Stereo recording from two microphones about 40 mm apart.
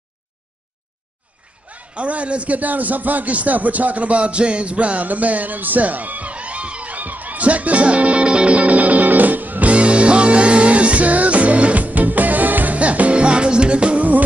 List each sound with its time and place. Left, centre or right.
1.7 s a man's voice: right
8.5 s music: right
9.7 s music: right
12.7 s music: right